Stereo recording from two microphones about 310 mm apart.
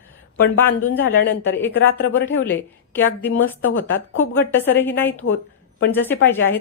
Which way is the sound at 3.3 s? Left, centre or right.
Left.